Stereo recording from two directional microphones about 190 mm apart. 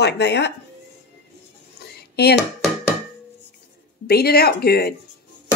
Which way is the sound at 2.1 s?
60° left (ahead or behind).